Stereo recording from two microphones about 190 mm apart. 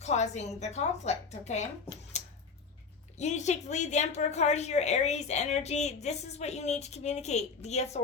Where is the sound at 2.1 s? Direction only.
35° left (ahead or behind).